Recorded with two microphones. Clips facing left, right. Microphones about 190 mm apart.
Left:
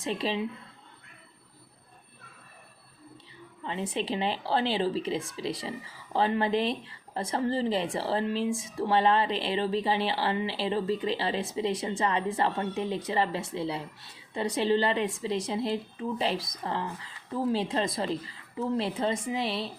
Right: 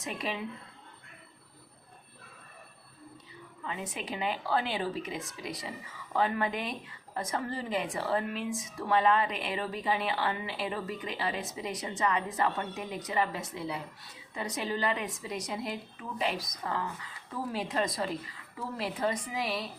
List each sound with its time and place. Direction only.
0.0 s a woman's voice: 30° left (ahead or behind)
3.6 s a woman's voice: 30° left (ahead or behind)